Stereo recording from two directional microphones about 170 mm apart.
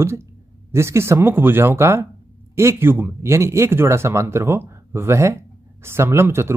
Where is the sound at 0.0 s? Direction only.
15° right (ahead or behind).